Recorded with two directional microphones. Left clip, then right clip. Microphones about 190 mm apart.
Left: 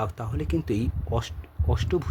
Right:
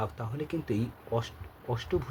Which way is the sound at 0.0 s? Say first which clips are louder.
Left 4 dB; 55° left (ahead or behind).